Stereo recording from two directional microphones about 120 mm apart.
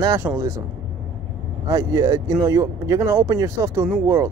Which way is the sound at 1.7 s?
30° right (ahead or behind).